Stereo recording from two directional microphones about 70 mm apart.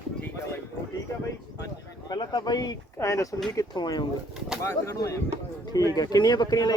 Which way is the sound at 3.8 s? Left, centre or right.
Left.